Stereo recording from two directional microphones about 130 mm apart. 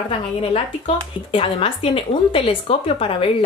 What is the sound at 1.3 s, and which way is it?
A woman's voice, 45° left (ahead or behind).